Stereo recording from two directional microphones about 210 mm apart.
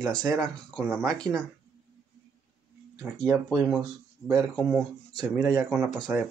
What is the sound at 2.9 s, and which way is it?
Speech, 10° right (ahead or behind).